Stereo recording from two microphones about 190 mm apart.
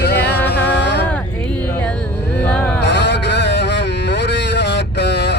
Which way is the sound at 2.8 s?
65° left (ahead or behind).